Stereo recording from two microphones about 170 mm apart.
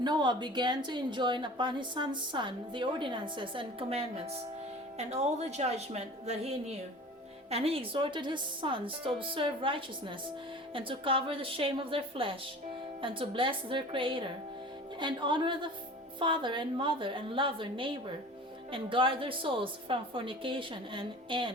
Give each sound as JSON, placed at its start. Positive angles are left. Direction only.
{"t": 0.0, "sound": "a woman's voice", "side_deg": -25}